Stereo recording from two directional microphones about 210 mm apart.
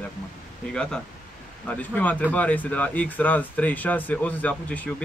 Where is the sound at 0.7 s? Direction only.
5° left (ahead or behind).